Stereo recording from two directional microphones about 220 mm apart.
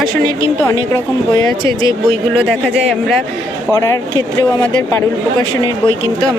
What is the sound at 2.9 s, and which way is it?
Speech, centre (ahead or behind).